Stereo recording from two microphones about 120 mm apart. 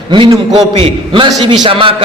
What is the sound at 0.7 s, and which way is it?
A man's voice, 50° right (ahead or behind).